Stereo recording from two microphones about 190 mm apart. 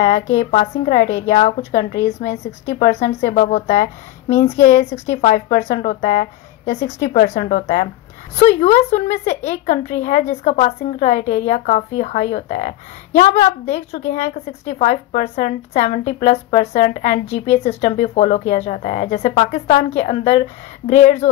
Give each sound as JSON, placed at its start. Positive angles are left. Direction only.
{"t": 0.0, "sound": "a woman's voice", "side_deg": 35}